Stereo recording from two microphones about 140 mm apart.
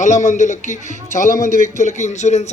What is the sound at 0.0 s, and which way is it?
Speech, 60° left (ahead or behind).